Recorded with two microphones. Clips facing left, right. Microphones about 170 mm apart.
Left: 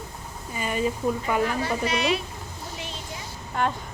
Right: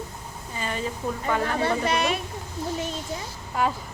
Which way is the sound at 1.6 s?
50° right (ahead or behind).